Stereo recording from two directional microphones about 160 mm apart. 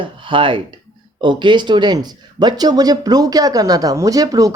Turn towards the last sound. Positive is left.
turn(degrees=-20)  # may be behind; listen again after turning